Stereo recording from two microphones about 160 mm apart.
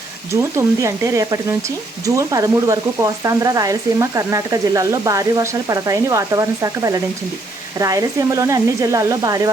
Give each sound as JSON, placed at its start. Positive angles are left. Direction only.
{"t": 0.5, "sound": "speech", "side_deg": -20}